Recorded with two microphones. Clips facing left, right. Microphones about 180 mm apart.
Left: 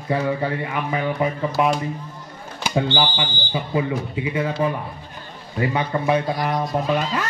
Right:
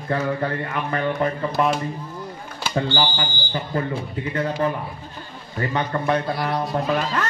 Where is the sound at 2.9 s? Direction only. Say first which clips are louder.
Left 1 dB; 10° left (ahead or behind).